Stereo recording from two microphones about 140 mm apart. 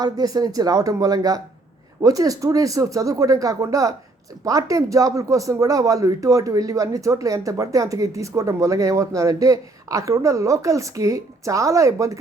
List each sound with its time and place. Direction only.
0.0 s speech: 25° right (ahead or behind)